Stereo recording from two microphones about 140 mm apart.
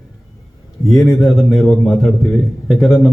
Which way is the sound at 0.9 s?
Centre (ahead or behind).